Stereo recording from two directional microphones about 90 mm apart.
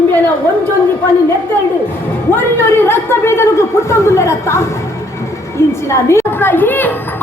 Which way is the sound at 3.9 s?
30° left (ahead or behind).